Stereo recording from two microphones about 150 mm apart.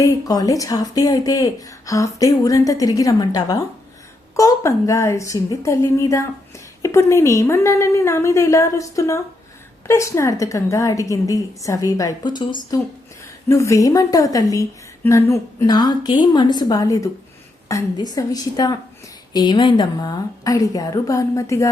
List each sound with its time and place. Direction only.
0.0 s speech: 25° left (ahead or behind)